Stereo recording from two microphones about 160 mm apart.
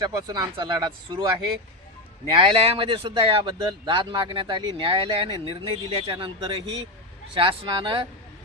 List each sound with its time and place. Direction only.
0.0 s speech: 25° right (ahead or behind)
2.4 s speech: 30° right (ahead or behind)